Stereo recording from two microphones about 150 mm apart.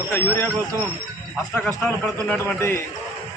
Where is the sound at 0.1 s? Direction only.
15° left (ahead or behind).